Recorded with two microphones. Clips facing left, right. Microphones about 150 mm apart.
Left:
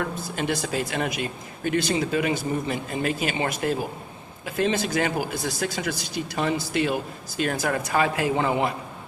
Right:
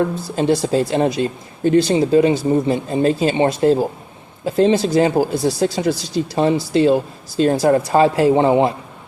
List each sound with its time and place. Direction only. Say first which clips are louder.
0.0 s speech: right 9 dB; 30° right (ahead or behind)